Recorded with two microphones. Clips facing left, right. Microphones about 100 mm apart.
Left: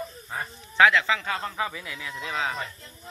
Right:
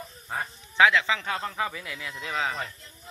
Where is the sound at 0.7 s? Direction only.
20° right (ahead or behind).